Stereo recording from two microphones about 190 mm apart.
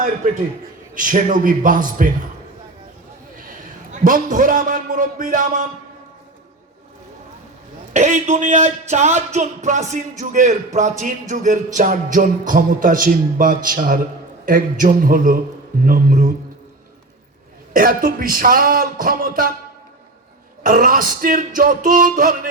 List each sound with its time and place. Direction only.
0.9 s speech: 45° right (ahead or behind)
4.0 s speech: 45° right (ahead or behind)
7.9 s speech: 40° right (ahead or behind)
17.7 s speech: 45° right (ahead or behind)
20.7 s speech: 45° right (ahead or behind)